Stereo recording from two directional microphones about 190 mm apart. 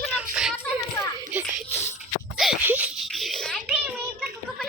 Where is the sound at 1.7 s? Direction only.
35° left (ahead or behind).